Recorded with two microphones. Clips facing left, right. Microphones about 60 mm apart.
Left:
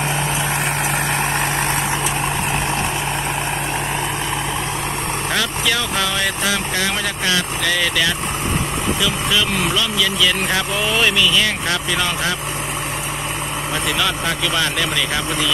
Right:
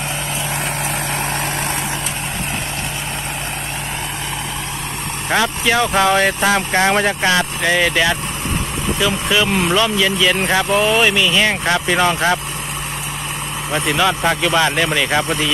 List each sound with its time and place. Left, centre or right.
5.3 s speech: right
10.8 s speech: centre
13.8 s speech: centre